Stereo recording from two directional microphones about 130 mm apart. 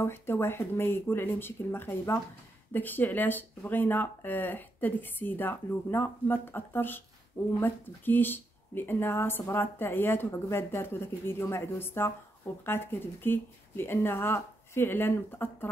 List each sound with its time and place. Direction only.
0.0 s speech: 15° left (ahead or behind)